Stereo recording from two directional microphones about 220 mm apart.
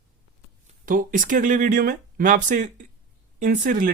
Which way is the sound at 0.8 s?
40° right (ahead or behind).